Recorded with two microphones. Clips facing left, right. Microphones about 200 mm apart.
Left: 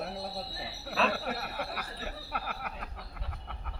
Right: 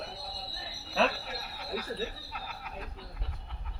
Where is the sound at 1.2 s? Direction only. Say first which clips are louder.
Left 5 dB; 60° left (ahead or behind).